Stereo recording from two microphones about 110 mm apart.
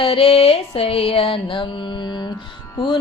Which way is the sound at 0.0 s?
60° left (ahead or behind).